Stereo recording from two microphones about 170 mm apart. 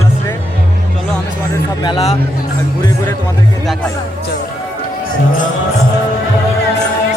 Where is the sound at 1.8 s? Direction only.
30° left (ahead or behind).